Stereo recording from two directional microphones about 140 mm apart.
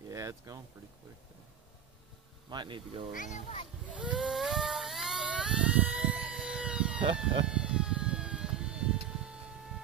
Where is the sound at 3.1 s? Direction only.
60° left (ahead or behind).